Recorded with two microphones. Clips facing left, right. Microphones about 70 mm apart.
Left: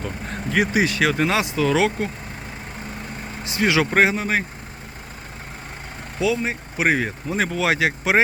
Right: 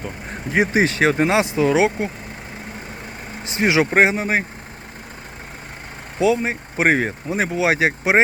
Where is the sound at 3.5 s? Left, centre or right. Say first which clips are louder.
Right 2 dB; right.